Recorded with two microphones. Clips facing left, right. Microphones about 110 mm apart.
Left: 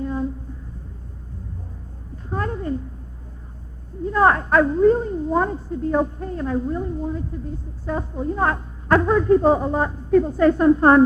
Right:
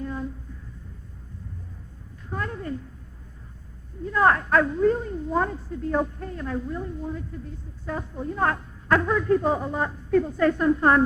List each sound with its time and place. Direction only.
0.0 s a sound: 30° left (ahead or behind)
2.3 s cat: 35° left (ahead or behind)
4.0 s a woman's voice: 30° left (ahead or behind)